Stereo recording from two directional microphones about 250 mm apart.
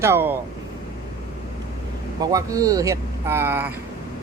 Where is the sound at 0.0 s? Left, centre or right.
Centre.